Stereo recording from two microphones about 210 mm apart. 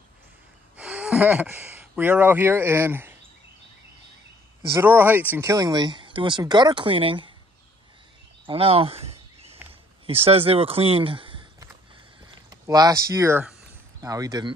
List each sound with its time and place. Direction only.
0.7 s speech: 5° right (ahead or behind)
4.7 s speech: 10° right (ahead or behind)
8.5 s a sound: 25° right (ahead or behind)
9.7 s speech: 25° right (ahead or behind)
12.4 s speech: 15° right (ahead or behind)